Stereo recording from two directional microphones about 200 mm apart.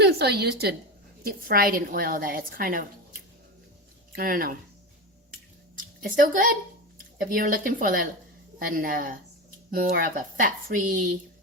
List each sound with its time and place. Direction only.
0.0 s a woman's voice: 55° right (ahead or behind)
4.1 s a woman's voice: 45° right (ahead or behind)
5.7 s a sound: 40° right (ahead or behind)
7.2 s a woman's voice: 45° right (ahead or behind)